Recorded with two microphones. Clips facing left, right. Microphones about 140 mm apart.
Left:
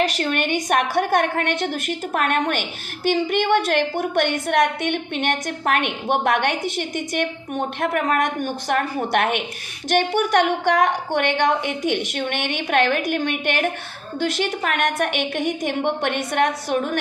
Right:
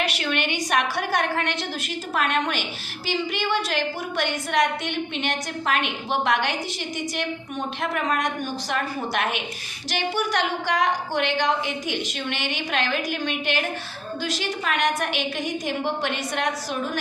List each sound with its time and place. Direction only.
0.0 s a woman's voice: 45° left (ahead or behind); by 17.0 s 60° left (ahead or behind)